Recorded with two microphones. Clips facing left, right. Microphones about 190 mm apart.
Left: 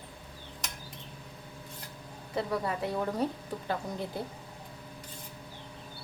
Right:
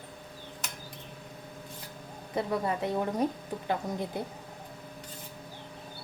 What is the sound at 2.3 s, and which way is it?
Speech, 20° right (ahead or behind).